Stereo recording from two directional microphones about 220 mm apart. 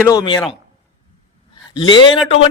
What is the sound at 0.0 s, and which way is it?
Speech, 15° left (ahead or behind).